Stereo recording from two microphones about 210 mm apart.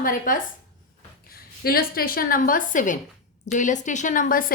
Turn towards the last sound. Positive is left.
turn(degrees=40)  # may be behind; listen again after turning